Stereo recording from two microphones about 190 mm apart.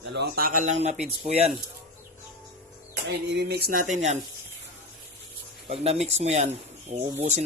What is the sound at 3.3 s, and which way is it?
Speech, 60° right (ahead or behind).